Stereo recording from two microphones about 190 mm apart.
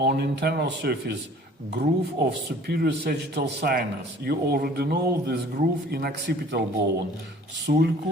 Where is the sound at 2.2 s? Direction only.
60° right (ahead or behind).